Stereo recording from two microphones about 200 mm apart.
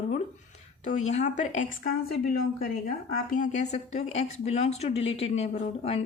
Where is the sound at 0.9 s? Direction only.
35° left (ahead or behind).